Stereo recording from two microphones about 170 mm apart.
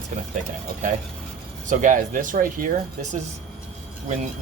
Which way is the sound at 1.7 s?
50° right (ahead or behind).